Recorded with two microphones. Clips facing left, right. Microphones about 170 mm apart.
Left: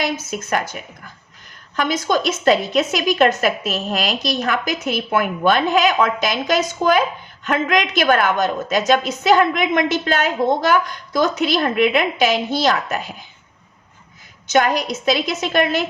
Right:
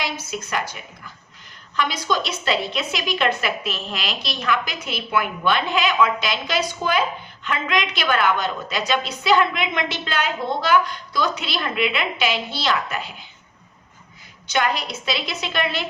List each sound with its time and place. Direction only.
0.0 s a woman's voice: 50° left (ahead or behind)
14.5 s a woman's voice: 45° left (ahead or behind)